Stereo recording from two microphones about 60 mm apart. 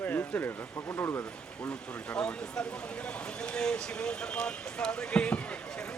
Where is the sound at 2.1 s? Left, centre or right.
Centre.